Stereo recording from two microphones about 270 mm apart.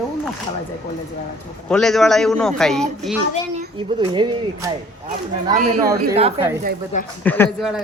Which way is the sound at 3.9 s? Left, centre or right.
Centre.